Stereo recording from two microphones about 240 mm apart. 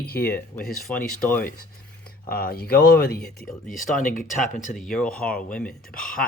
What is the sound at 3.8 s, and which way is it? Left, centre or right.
Speech, left.